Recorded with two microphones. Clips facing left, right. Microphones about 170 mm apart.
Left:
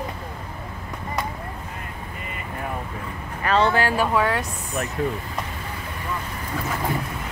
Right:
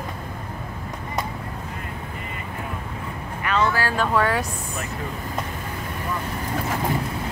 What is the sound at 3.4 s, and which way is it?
Speech, 30° left (ahead or behind).